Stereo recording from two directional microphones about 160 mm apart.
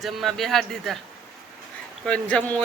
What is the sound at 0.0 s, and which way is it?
Speech, centre (ahead or behind).